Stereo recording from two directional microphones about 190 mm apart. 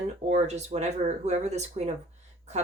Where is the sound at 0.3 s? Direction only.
35° right (ahead or behind).